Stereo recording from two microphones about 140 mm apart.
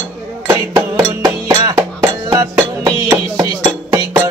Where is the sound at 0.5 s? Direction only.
25° right (ahead or behind).